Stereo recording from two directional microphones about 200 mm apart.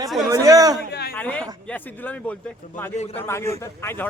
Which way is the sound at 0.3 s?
15° right (ahead or behind).